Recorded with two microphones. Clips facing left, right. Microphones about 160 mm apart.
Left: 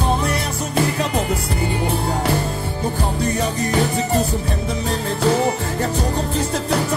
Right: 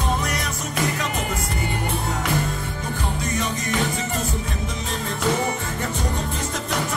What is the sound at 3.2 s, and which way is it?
Music, 35° left (ahead or behind).